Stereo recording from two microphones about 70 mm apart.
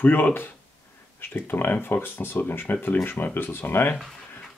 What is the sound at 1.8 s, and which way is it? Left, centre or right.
Speech, left.